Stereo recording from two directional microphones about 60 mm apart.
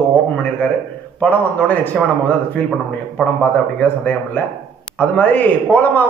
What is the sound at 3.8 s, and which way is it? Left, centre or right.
A man's voice, left.